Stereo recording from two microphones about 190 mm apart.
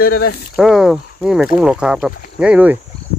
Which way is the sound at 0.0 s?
55° left (ahead or behind).